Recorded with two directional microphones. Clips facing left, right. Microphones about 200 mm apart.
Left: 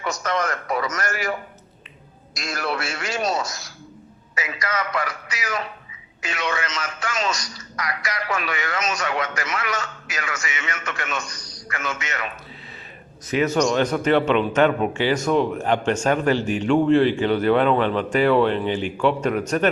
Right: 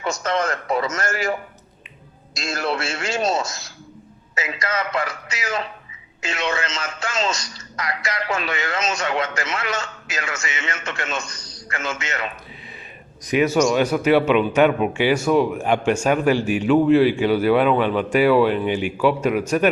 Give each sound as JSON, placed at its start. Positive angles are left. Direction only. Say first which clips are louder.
{"t": 0.0, "sound": "speech", "louder": "right 2 dB", "side_deg": -25}
{"t": 2.3, "sound": "speech", "louder": "right 2 dB", "side_deg": -25}
{"t": 13.2, "sound": "speech", "louder": "right 2 dB", "side_deg": -10}